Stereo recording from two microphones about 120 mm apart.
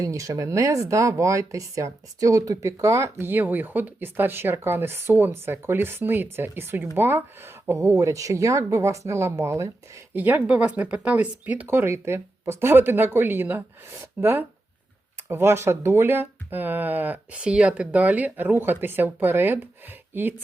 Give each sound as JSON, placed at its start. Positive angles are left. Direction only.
{"t": 0.0, "sound": "speech", "side_deg": -25}
{"t": 10.2, "sound": "speech", "side_deg": -15}